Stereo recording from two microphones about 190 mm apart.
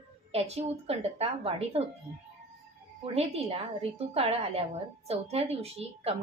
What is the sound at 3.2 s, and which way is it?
Speech, 35° right (ahead or behind).